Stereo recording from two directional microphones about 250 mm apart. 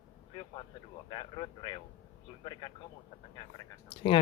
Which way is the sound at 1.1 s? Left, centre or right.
Centre.